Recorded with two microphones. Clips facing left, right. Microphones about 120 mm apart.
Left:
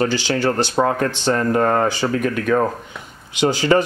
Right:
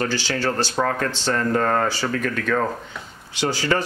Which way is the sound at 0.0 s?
20° left (ahead or behind).